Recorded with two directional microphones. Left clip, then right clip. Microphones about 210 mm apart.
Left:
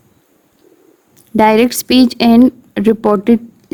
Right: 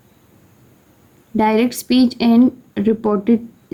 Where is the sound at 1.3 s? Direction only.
45° left (ahead or behind).